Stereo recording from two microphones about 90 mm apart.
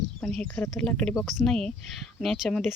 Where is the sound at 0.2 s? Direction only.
10° left (ahead or behind).